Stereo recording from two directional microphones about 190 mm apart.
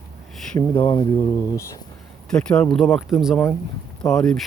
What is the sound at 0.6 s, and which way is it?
Speech, 20° left (ahead or behind).